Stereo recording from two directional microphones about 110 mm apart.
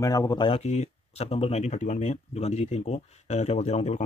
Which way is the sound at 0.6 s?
90° left.